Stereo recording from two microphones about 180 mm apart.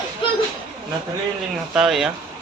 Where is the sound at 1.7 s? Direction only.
5° right (ahead or behind).